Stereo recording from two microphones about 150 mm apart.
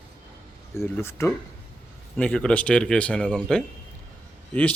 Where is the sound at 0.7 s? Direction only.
15° left (ahead or behind).